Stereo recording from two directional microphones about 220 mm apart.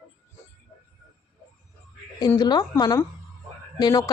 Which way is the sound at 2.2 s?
20° left (ahead or behind).